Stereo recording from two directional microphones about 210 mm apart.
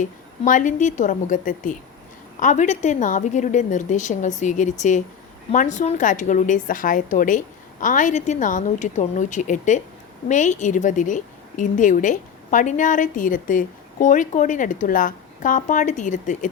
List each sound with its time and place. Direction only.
0.0 s a woman's voice: 40° left (ahead or behind)